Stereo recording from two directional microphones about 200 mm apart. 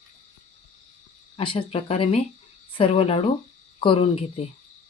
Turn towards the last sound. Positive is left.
turn(degrees=30)  # may be behind; listen again after turning